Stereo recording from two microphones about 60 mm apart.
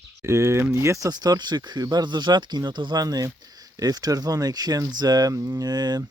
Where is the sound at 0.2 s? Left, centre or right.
Right.